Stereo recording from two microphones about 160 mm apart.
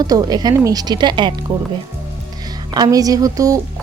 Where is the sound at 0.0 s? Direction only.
25° right (ahead or behind).